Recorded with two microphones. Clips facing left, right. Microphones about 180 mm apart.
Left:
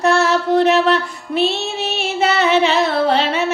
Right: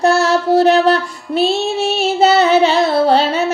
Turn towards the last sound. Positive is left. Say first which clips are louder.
# right 4 dB
turn(degrees=-35)  # may be behind; listen again after turning